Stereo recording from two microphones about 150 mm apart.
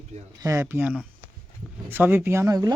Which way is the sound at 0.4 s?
15° right (ahead or behind).